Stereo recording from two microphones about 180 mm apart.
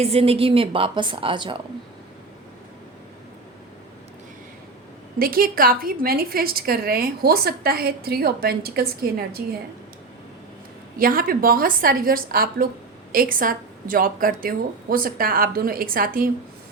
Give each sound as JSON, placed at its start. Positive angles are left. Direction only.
{"t": 0.0, "sound": "a woman's voice", "side_deg": -35}
{"t": 5.2, "sound": "a woman's voice", "side_deg": -55}
{"t": 10.9, "sound": "a woman's voice", "side_deg": -50}